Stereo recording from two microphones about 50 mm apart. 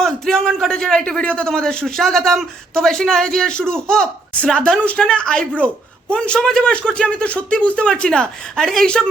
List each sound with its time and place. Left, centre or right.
0.0 s a man's voice: centre